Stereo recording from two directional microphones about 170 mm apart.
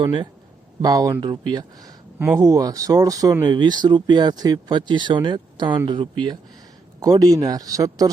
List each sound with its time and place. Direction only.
0.0 s speech: 30° right (ahead or behind)
2.1 s speech: 10° right (ahead or behind)
2.4 s speech: 20° right (ahead or behind)